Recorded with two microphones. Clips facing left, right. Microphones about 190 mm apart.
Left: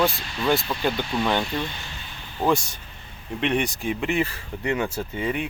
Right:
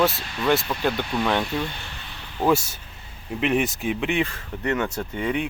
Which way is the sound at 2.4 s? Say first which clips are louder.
Right 1 dB; 5° right (ahead or behind).